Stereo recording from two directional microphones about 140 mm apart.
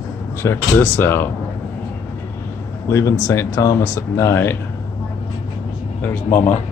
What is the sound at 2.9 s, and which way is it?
Speech, 20° left (ahead or behind).